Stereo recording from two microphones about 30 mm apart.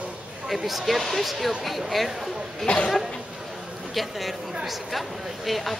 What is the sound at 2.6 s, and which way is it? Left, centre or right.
Speech, left.